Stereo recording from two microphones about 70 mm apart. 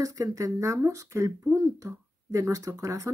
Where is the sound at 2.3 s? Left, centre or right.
Right.